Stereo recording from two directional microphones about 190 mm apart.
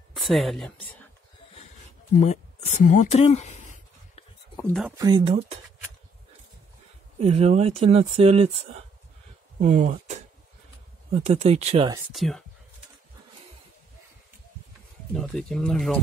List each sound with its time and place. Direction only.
0.1 s speech: centre (ahead or behind)
2.1 s a sound: 40° left (ahead or behind)
4.9 s speech: 20° right (ahead or behind)
7.2 s speech: 35° right (ahead or behind)
9.6 s speech: 40° right (ahead or behind)
12.1 s speech: centre (ahead or behind)
15.1 s speech: centre (ahead or behind)